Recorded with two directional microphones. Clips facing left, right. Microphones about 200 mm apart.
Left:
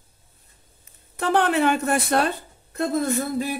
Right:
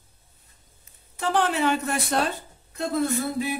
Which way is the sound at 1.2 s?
55° left (ahead or behind).